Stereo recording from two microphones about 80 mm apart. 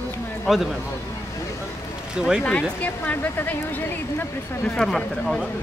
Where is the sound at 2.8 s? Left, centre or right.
Centre.